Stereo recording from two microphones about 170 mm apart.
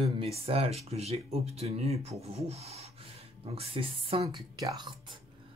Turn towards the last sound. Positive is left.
turn(degrees=-30)  # may be behind; listen again after turning